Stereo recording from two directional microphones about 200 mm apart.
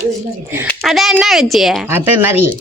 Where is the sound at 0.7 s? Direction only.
Centre (ahead or behind).